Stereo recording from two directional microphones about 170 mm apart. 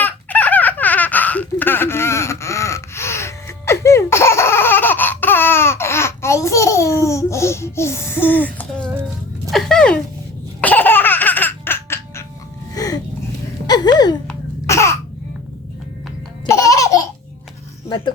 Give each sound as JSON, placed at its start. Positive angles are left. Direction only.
{"t": 0.0, "sound": "laughter", "side_deg": 10}
{"t": 9.5, "sound": "a sound", "side_deg": 0}
{"t": 10.6, "sound": "laughter", "side_deg": 10}
{"t": 12.7, "sound": "music", "side_deg": 20}
{"t": 13.7, "sound": "a sound", "side_deg": 25}
{"t": 16.5, "sound": "laughter", "side_deg": 20}